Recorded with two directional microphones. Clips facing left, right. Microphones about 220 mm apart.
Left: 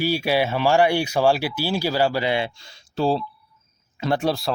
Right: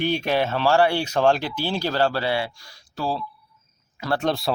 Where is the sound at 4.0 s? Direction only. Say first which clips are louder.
Left 2 dB; 15° left (ahead or behind).